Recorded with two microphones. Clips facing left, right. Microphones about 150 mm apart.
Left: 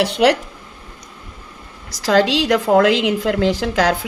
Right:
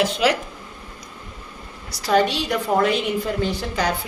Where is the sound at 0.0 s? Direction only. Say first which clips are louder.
Left 5 dB; 70° left (ahead or behind).